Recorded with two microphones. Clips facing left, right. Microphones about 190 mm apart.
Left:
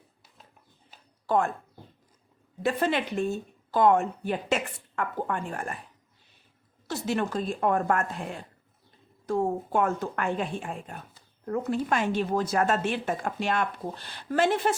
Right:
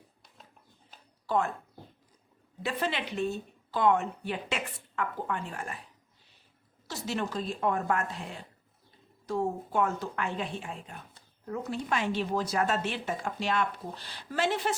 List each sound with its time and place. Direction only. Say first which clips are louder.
1.3 s speech: left 3 dB; 50° left (ahead or behind)
2.6 s a woman's voice: left 6 dB; 50° left (ahead or behind)
6.8 s a woman's voice: left 5 dB; 55° left (ahead or behind)